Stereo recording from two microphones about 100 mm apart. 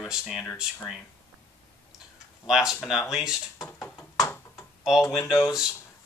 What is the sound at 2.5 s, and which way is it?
Speech, 5° right (ahead or behind).